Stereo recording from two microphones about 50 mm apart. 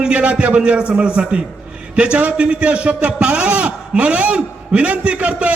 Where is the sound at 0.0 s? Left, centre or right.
Right.